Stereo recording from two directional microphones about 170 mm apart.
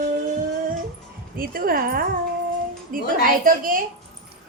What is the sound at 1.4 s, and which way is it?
A woman's voice, 60° right (ahead or behind).